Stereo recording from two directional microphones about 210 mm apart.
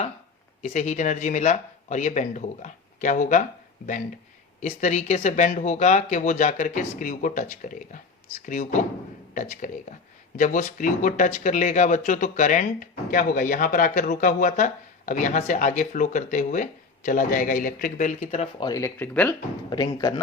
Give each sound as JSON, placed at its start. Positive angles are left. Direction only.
{"t": 0.6, "sound": "speech", "side_deg": 35}
{"t": 4.6, "sound": "speech", "side_deg": 35}
{"t": 18.7, "sound": "speech", "side_deg": 10}